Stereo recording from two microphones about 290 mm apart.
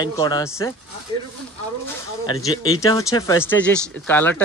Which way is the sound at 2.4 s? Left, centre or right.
Centre.